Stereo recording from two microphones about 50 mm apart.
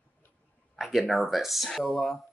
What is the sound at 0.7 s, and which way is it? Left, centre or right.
Speech, centre.